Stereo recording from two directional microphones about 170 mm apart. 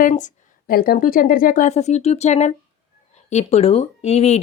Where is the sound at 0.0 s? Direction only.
45° left (ahead or behind).